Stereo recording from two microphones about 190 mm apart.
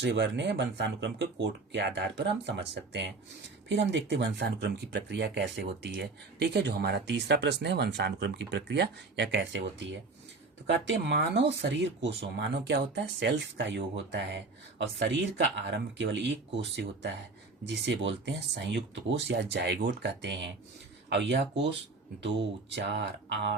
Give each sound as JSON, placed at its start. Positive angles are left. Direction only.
{"t": 0.0, "sound": "speech", "side_deg": -70}
{"t": 17.7, "sound": "speech", "side_deg": -70}